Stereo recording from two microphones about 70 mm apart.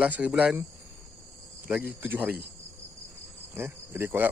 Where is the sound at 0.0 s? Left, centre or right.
Centre.